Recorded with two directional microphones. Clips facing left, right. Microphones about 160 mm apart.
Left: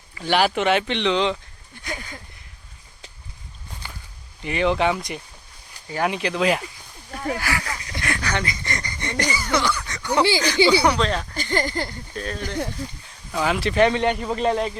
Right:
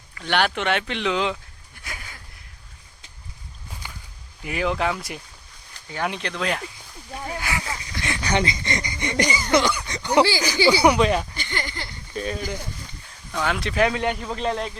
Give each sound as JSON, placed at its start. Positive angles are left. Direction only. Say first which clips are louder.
{"t": 0.1, "sound": "speech", "louder": "left 3 dB", "side_deg": 0}
{"t": 3.8, "sound": "walk", "louder": "left 1 dB", "side_deg": -15}
{"t": 4.4, "sound": "speech", "louder": "left 4 dB", "side_deg": -5}
{"t": 7.4, "sound": "a sound", "louder": "left 2 dB", "side_deg": -20}
{"t": 8.0, "sound": "speech", "louder": "right 2 dB", "side_deg": -20}
{"t": 11.3, "sound": "speech", "louder": "left 8 dB", "side_deg": 40}
{"t": 12.1, "sound": "speech", "louder": "right 1 dB", "side_deg": -5}